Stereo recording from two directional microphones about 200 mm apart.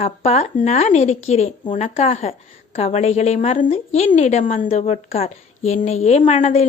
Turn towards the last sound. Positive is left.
turn(degrees=35)  # may be behind; listen again after turning